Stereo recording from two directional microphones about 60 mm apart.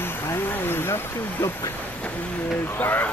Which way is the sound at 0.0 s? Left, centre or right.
Left.